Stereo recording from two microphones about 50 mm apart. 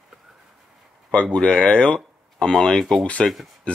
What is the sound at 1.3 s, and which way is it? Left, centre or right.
Speech, centre.